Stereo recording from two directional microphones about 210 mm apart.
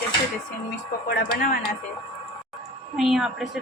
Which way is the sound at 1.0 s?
40° left (ahead or behind).